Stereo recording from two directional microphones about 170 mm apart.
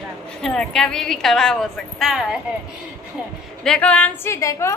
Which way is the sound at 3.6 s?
5° left (ahead or behind).